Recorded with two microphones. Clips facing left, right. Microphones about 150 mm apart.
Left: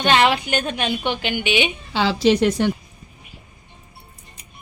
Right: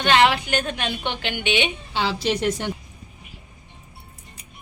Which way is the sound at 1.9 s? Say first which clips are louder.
Left 9 dB; 90° left.